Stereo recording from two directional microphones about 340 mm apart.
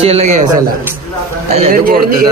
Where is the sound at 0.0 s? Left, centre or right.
Centre.